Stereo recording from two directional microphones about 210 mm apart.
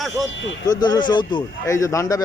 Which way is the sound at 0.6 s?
20° left (ahead or behind).